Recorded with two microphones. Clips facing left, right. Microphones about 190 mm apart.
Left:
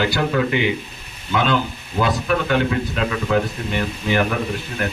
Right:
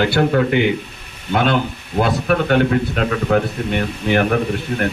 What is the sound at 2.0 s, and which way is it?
A man's voice, 55° right (ahead or behind).